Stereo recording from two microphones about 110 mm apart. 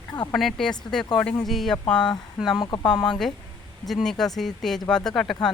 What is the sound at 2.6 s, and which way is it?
Speech, 40° left (ahead or behind).